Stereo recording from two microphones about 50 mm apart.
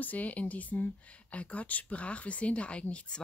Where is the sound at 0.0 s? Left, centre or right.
Left.